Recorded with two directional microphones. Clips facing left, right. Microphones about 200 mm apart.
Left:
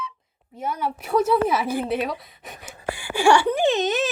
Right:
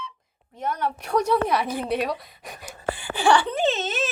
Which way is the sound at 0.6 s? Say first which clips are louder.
Even; 5° left (ahead or behind).